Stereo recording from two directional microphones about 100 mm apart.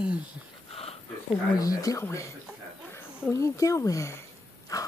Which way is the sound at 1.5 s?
35° left (ahead or behind).